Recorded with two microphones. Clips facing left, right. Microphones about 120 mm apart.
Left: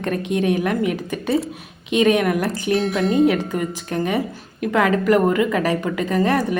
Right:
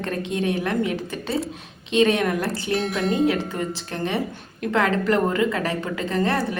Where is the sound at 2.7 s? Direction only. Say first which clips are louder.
Left 4 dB; centre (ahead or behind).